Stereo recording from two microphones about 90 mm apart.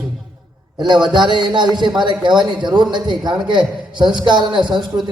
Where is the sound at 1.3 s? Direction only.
60° right (ahead or behind).